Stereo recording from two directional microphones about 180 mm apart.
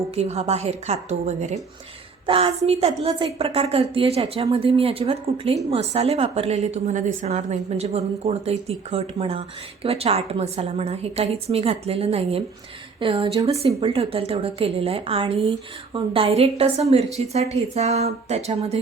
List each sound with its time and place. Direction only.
0.2 s a woman's voice: 35° right (ahead or behind)